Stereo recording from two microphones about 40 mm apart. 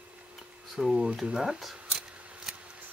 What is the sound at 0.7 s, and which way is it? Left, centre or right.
Scissors, centre.